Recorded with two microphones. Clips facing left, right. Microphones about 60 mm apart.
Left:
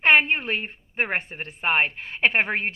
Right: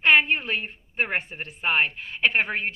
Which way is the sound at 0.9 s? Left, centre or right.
Left.